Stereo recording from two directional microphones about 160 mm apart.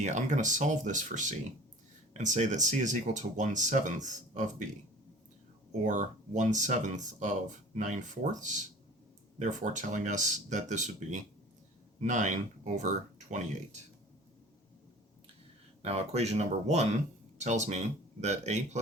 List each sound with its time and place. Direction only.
0.0 s speech: 50° right (ahead or behind)
5.8 s speech: 50° right (ahead or behind)
15.8 s speech: 40° right (ahead or behind)